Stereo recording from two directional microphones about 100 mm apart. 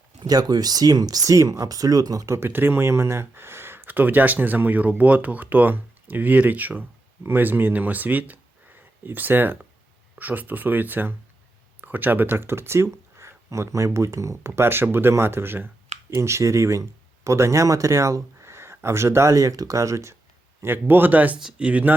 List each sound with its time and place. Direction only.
0.2 s speech: 40° right (ahead or behind); by 21.9 s 15° right (ahead or behind)